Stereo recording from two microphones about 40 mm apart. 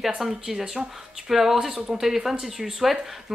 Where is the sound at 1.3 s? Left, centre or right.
Centre.